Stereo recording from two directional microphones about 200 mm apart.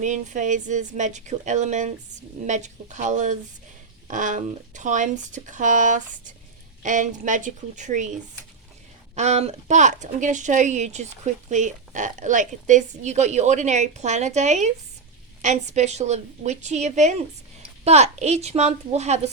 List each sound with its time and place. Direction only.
0.0 s a woman's voice: 40° right (ahead or behind)
9.1 s a woman's voice: 35° right (ahead or behind)